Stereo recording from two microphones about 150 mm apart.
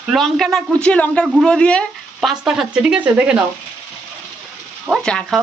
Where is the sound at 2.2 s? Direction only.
5° right (ahead or behind).